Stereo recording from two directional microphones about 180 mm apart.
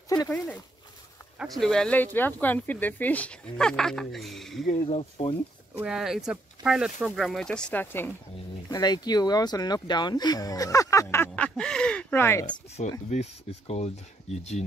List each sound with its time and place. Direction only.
1.6 s speech: 5° left (ahead or behind)
4.8 s speech: 35° left (ahead or behind)
5.8 s speech: 5° right (ahead or behind)
8.6 s speech: 20° left (ahead or behind)
12.8 s speech: 45° left (ahead or behind)